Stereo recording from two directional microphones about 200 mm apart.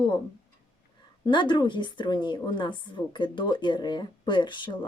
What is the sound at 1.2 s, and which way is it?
Speech, 25° left (ahead or behind).